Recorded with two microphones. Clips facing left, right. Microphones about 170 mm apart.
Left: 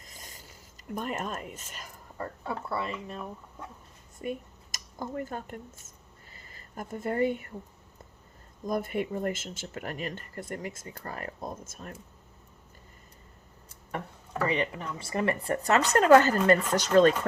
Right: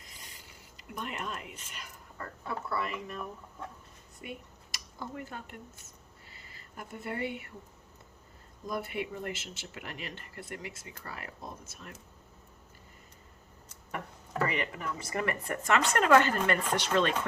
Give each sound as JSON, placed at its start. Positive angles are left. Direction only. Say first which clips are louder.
{"t": 0.0, "sound": "a sound", "louder": "left 3 dB", "side_deg": 45}
{"t": 2.5, "sound": "speech", "louder": "left 1 dB", "side_deg": 30}
{"t": 4.2, "sound": "speech", "louder": "left 9 dB", "side_deg": 45}
{"t": 8.6, "sound": "speech", "louder": "left 5 dB", "side_deg": 45}
{"t": 14.4, "sound": "speech", "louder": "left 4 dB", "side_deg": 25}